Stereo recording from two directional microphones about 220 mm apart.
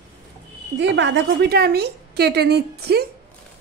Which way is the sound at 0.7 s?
55° right (ahead or behind).